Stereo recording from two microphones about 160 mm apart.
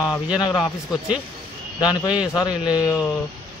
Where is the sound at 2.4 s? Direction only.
25° left (ahead or behind).